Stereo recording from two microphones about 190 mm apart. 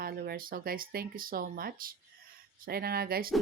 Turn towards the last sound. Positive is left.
turn(degrees=-50)  # may be behind; listen again after turning